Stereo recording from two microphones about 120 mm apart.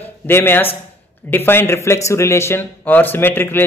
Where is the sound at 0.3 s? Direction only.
20° left (ahead or behind).